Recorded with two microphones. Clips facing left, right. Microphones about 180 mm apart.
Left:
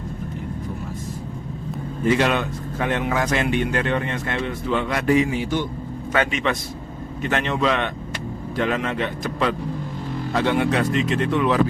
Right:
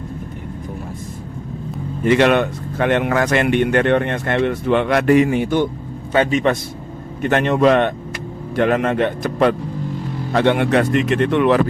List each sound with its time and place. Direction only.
2.0 s speech: 65° right (ahead or behind)
7.2 s speech: 50° right (ahead or behind)